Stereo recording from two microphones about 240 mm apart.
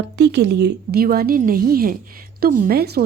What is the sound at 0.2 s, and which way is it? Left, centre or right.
A woman's voice, right.